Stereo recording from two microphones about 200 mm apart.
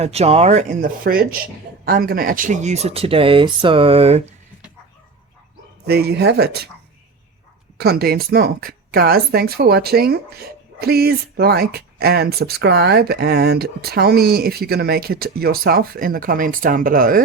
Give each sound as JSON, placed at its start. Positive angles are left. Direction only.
{"t": 0.0, "sound": "speech", "side_deg": -30}
{"t": 5.8, "sound": "a woman's voice", "side_deg": -50}
{"t": 7.8, "sound": "a woman's voice", "side_deg": -50}